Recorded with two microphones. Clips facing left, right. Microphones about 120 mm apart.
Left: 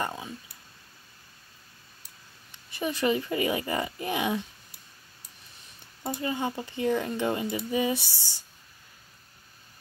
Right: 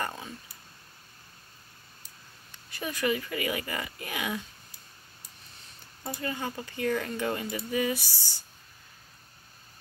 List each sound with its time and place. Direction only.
0.0 s clicking: 15° left (ahead or behind)
2.5 s speech: 20° left (ahead or behind)
6.0 s speech: 20° left (ahead or behind)